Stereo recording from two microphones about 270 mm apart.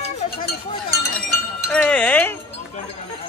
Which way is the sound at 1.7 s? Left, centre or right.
Centre.